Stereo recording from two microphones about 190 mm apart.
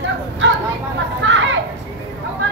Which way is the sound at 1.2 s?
80° right.